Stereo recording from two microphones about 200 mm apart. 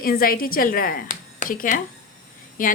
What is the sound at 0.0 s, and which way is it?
A woman's voice, 45° left (ahead or behind).